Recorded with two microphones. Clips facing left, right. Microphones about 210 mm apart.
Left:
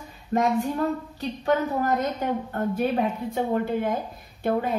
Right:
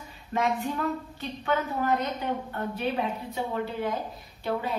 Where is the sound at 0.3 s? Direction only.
40° left (ahead or behind).